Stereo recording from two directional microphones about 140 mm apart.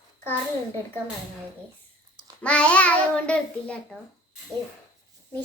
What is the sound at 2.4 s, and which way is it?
A child's voice, 10° left (ahead or behind).